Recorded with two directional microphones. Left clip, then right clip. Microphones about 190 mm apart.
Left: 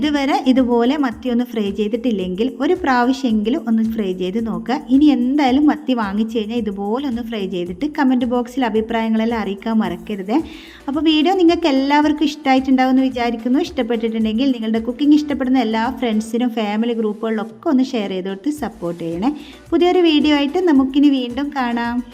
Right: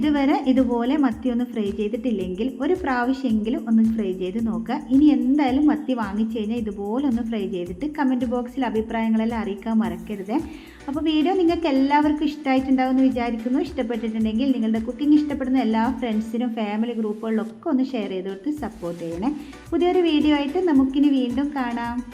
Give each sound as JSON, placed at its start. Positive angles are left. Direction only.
{"t": 0.0, "sound": "a woman's voice", "side_deg": 45}
{"t": 19.7, "sound": "a woman's voice", "side_deg": 45}